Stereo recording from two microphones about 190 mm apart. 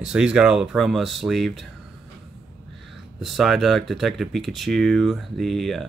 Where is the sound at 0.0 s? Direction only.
5° right (ahead or behind).